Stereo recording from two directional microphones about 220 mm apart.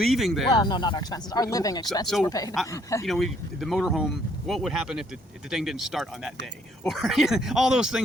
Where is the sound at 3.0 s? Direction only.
Centre (ahead or behind).